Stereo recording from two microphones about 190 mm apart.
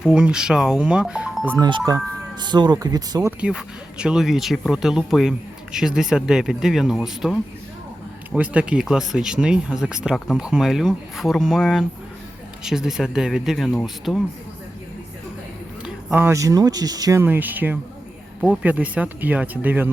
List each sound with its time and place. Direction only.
0.0 s speech: 5° right (ahead or behind)
1.5 s speech: 20° right (ahead or behind)
3.4 s speech: 5° right (ahead or behind)
15.8 s speech: 10° right (ahead or behind)